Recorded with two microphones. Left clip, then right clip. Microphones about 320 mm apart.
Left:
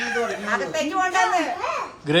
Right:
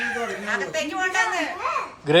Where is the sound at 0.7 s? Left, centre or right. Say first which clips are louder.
Left 3 dB; left.